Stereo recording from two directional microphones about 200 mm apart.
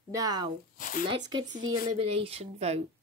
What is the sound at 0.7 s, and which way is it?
Speech, 45° left (ahead or behind).